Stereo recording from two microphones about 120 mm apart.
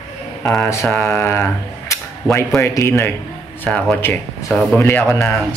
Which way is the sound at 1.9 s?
20° left (ahead or behind).